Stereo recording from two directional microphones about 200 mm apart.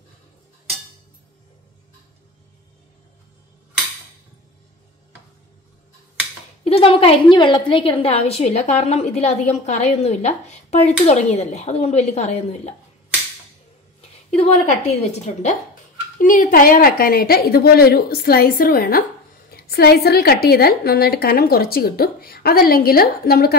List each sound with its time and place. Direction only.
6.6 s a woman's voice: 30° left (ahead or behind)
14.4 s a woman's voice: 30° left (ahead or behind); by 23.5 s 50° left (ahead or behind)